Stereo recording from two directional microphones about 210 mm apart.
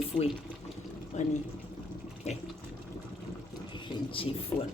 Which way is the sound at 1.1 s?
35° left (ahead or behind).